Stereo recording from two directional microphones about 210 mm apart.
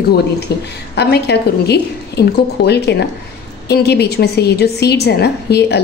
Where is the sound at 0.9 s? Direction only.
50° left (ahead or behind).